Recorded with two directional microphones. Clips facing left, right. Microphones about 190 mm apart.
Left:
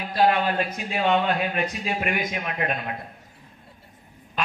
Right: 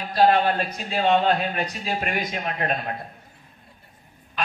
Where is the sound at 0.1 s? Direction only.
35° right (ahead or behind).